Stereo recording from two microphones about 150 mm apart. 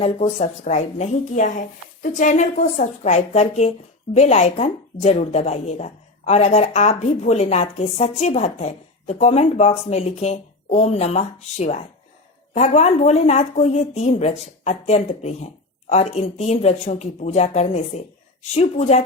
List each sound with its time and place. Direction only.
0.0 s speech: 45° left (ahead or behind)